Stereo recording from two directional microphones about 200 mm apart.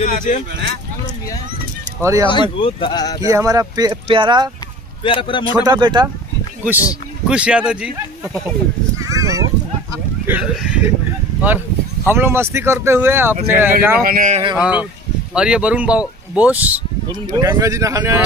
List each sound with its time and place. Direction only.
0.0 s speech: 40° left (ahead or behind)
2.0 s speech: 15° right (ahead or behind)
2.2 s speech: 25° left (ahead or behind)
3.3 s speech: 15° right (ahead or behind)
5.0 s speech: 25° left (ahead or behind)
5.7 s speech: 20° right (ahead or behind)
7.2 s speech: 5° right (ahead or behind)
8.9 s a sound: 15° right (ahead or behind)
12.1 s speech: 10° right (ahead or behind)
14.0 s speech: 40° right (ahead or behind)
14.6 s speech: 5° right (ahead or behind)
17.1 s speech: 20° right (ahead or behind)